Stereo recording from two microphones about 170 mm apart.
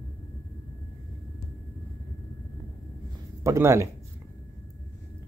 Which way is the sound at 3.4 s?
15° right (ahead or behind).